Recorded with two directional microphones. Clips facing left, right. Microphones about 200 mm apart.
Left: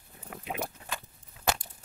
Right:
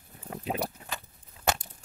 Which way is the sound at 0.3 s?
35° right (ahead or behind).